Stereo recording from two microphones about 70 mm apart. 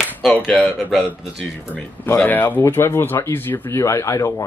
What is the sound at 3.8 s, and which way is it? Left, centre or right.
Speech, left.